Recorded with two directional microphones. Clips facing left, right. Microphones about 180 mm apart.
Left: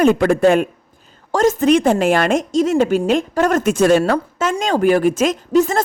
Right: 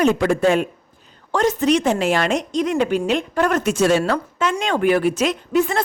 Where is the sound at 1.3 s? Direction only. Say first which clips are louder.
Left 4 dB; 45° left (ahead or behind).